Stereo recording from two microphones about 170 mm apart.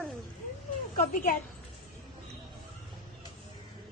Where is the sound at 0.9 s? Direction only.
55° left (ahead or behind).